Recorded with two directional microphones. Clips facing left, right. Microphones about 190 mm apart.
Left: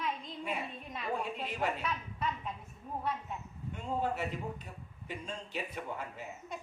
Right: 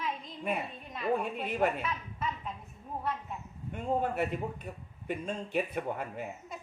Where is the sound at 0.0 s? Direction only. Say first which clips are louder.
Right 2 dB; centre (ahead or behind).